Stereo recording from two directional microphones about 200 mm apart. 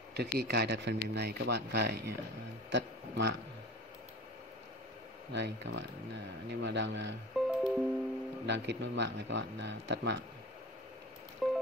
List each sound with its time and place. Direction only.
0.1 s speech: 55° right (ahead or behind)
5.3 s speech: 65° right (ahead or behind)
7.3 s music: centre (ahead or behind)
8.5 s speech: 60° right (ahead or behind)
11.4 s music: centre (ahead or behind)